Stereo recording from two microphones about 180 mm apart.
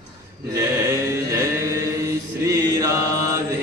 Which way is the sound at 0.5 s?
15° right (ahead or behind).